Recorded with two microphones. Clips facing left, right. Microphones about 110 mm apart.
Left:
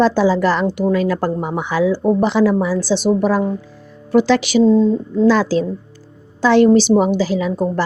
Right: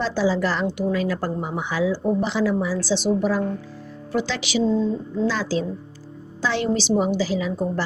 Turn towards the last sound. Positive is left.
turn(degrees=55)  # may be behind; listen again after turning